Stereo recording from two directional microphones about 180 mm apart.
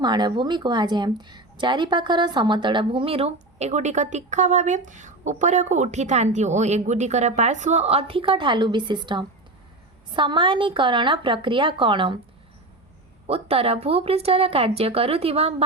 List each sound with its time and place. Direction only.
0.0 s a woman's voice: 25° right (ahead or behind)
13.2 s speech: 35° right (ahead or behind)